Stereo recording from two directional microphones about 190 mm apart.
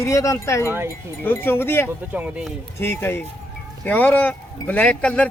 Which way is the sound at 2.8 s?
10° left (ahead or behind).